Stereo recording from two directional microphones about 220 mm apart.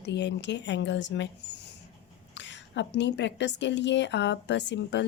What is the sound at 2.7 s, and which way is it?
A woman's voice, 55° left (ahead or behind).